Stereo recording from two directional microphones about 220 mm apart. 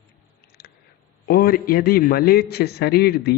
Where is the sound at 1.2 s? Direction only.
45° left (ahead or behind).